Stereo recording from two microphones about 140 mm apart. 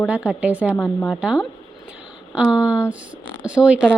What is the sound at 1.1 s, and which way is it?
Speech, 5° right (ahead or behind).